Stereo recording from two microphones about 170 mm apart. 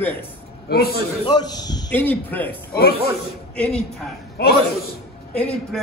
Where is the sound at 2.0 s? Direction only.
10° left (ahead or behind).